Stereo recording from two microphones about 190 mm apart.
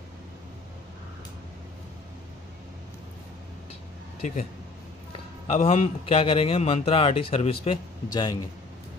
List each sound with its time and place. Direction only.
5.5 s a man's voice: 30° left (ahead or behind)